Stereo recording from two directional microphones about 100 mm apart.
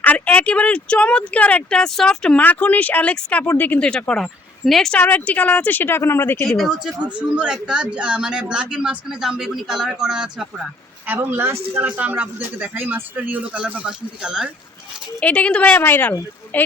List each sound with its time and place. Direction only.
0.0 s speech: 15° left (ahead or behind)
4.9 s speech: 15° left (ahead or behind)
6.6 s speech: centre (ahead or behind)
11.0 s a man's voice: 20° right (ahead or behind)
15.2 s speech: 10° left (ahead or behind)